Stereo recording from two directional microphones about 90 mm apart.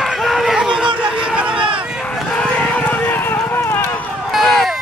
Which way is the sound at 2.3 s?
15° left (ahead or behind).